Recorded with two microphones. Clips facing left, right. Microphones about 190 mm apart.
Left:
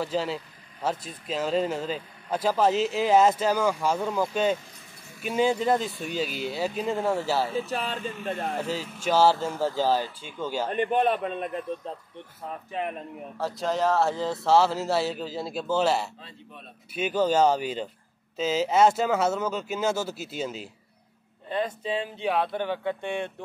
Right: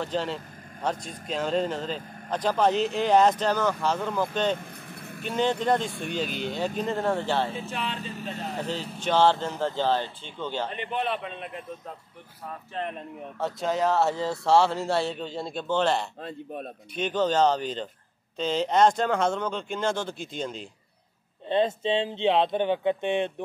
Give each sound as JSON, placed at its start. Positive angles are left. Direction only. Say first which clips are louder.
{"t": 0.0, "sound": "speech", "louder": "left 1 dB", "side_deg": 5}
{"t": 4.6, "sound": "vehicle", "louder": "right 8 dB", "side_deg": -60}
{"t": 5.2, "sound": "speech", "louder": "left 2 dB", "side_deg": 10}
{"t": 5.9, "sound": "speech", "louder": "right 1 dB", "side_deg": -55}
{"t": 6.1, "sound": "speech", "louder": "left 1 dB", "side_deg": 5}
{"t": 7.5, "sound": "speech", "louder": "left 3 dB", "side_deg": 40}
{"t": 9.0, "sound": "speech", "louder": "left 1 dB", "side_deg": 5}
{"t": 10.7, "sound": "a man's voice", "louder": "left 6 dB", "side_deg": 50}
{"t": 12.7, "sound": "speech", "louder": "left 1 dB", "side_deg": 5}
{"t": 16.2, "sound": "speech", "louder": "right 11 dB", "side_deg": -50}
{"t": 16.9, "sound": "speech", "louder": "left 1 dB", "side_deg": 10}
{"t": 21.5, "sound": "speech", "louder": "right 5 dB", "side_deg": -25}